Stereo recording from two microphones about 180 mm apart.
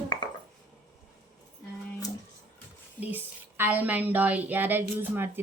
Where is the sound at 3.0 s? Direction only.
10° right (ahead or behind).